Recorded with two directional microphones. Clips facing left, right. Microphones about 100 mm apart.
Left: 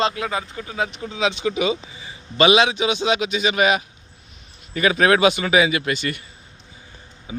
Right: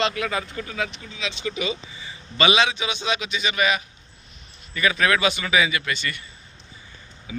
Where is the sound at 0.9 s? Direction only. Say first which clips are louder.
Left 8 dB; 55° left (ahead or behind).